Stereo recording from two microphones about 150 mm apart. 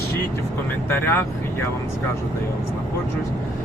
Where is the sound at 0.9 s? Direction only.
15° left (ahead or behind).